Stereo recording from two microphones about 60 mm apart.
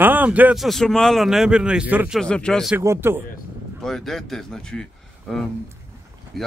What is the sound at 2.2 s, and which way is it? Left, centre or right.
Speech, centre.